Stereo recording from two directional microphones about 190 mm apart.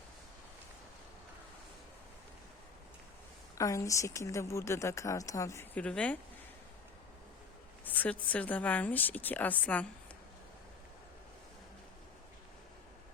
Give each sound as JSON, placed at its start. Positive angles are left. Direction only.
{"t": 3.6, "sound": "a woman's voice", "side_deg": 15}
{"t": 7.9, "sound": "a woman's voice", "side_deg": 10}